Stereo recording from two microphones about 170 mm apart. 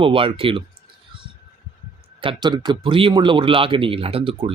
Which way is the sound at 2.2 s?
25° right (ahead or behind).